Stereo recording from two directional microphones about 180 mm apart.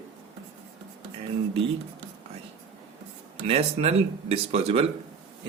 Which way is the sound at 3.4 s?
35° right (ahead or behind).